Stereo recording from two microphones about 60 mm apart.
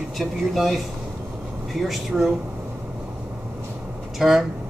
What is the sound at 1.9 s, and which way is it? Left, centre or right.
Speech, centre.